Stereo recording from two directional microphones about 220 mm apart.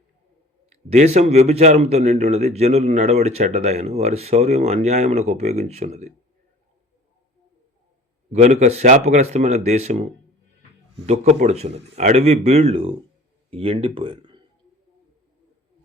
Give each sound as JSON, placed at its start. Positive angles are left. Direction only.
{"t": 0.9, "sound": "speech", "side_deg": -30}
{"t": 8.3, "sound": "speech", "side_deg": -30}